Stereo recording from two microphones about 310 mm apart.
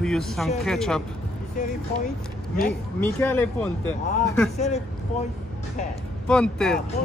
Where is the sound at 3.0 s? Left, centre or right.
Centre.